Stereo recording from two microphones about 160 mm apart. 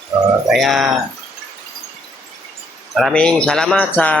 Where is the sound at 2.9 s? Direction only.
5° left (ahead or behind).